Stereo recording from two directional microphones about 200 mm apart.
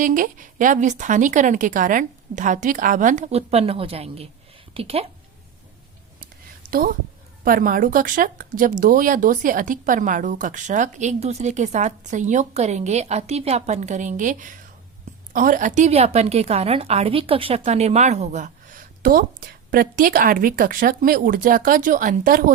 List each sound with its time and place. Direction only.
0.0 s a woman's voice: 40° right (ahead or behind)
6.1 s a sound: 45° right (ahead or behind)
7.4 s a woman's voice: 45° right (ahead or behind)